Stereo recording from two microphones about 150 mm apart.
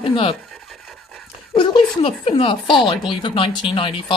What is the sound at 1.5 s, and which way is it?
Speech, 35° left (ahead or behind).